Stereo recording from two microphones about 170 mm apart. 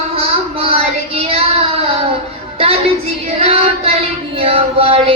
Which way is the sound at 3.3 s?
35° right (ahead or behind).